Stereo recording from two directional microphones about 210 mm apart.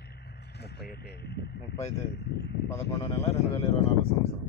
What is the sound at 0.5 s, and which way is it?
Speech, 50° left (ahead or behind).